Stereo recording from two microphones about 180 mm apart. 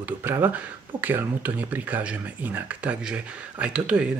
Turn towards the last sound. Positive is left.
turn(degrees=-5)  # may be behind; listen again after turning